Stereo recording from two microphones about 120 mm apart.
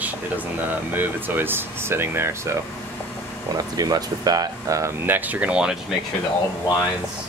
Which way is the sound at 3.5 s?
35° right (ahead or behind).